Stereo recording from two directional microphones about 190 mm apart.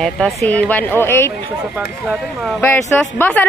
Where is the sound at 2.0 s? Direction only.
Centre (ahead or behind).